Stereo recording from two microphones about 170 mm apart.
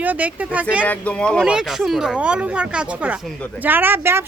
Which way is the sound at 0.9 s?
5° left (ahead or behind).